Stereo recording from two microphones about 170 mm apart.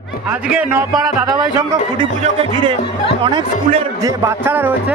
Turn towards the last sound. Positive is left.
turn(degrees=-10)  # may be behind; listen again after turning